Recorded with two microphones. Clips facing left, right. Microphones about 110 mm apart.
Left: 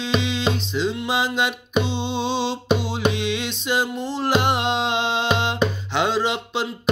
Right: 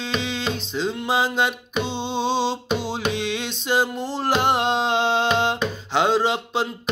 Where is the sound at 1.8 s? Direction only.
15° left (ahead or behind).